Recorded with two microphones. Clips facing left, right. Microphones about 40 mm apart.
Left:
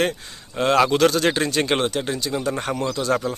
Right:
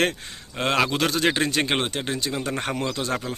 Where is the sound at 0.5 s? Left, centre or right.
Right.